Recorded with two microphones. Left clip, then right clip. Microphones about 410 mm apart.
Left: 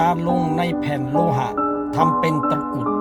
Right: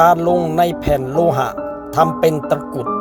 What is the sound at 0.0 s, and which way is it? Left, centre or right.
Speech, centre.